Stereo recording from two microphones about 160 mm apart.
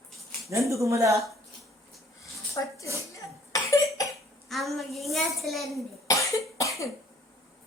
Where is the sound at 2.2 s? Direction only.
20° left (ahead or behind).